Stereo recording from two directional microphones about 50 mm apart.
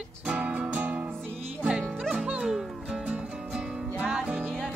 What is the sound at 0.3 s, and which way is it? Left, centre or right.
Music, right.